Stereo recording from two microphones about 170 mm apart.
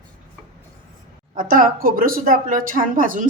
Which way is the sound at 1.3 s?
55° right (ahead or behind).